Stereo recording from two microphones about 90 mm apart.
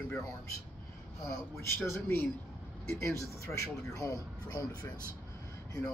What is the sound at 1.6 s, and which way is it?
Speech, 30° left (ahead or behind).